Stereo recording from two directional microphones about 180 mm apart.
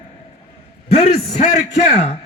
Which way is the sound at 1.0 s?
40° left (ahead or behind).